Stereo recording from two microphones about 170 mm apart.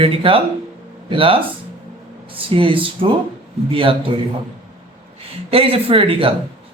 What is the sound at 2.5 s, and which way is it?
Speech, 30° right (ahead or behind).